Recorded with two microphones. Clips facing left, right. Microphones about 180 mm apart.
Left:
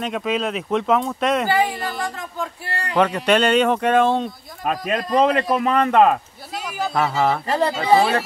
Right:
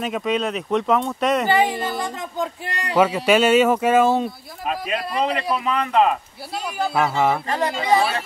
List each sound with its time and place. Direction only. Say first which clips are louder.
0.0 s speech: even; centre (ahead or behind)
1.5 s speech: right 1 dB; 20° right (ahead or behind)
3.0 s speech: right 1 dB; 5° right (ahead or behind)
4.6 s speech: left 3 dB; 45° left (ahead or behind)
6.6 s speech: right 1 dB; 5° right (ahead or behind)
7.4 s speech: left 2 dB; 30° left (ahead or behind)